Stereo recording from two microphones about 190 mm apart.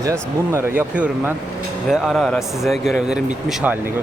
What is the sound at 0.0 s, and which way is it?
Speech, 15° right (ahead or behind).